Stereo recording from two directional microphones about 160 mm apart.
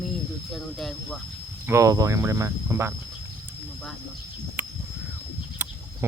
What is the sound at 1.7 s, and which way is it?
Speech, 20° right (ahead or behind).